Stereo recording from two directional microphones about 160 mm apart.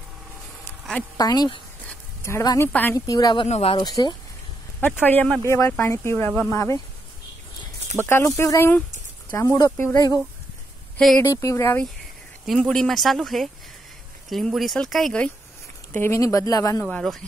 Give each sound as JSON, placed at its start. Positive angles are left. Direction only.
{"t": 1.1, "sound": "speech", "side_deg": 25}
{"t": 1.9, "sound": "a sound", "side_deg": 15}
{"t": 2.7, "sound": "speech", "side_deg": 15}
{"t": 3.2, "sound": "speech", "side_deg": 25}
{"t": 3.4, "sound": "speech", "side_deg": 45}
{"t": 3.7, "sound": "speech", "side_deg": 25}
{"t": 5.0, "sound": "speech", "side_deg": 10}
{"t": 8.0, "sound": "speech", "side_deg": 15}
{"t": 11.1, "sound": "speech", "side_deg": 20}
{"t": 12.4, "sound": "speech", "side_deg": 0}
{"t": 15.9, "sound": "speech", "side_deg": 15}
{"t": 16.8, "sound": "speech", "side_deg": 0}